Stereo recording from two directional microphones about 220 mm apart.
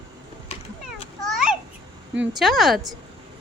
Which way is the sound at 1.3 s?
Centre (ahead or behind).